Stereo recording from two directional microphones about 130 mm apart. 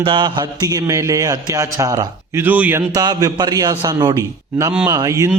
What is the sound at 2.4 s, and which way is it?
Speech, 15° right (ahead or behind).